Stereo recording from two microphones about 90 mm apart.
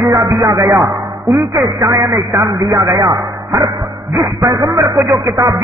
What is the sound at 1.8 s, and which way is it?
Speech, 35° right (ahead or behind).